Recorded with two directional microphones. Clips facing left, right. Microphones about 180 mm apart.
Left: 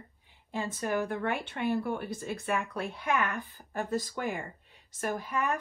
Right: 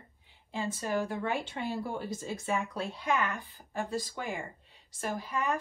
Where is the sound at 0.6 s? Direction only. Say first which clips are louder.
Left 1 dB; 55° left (ahead or behind).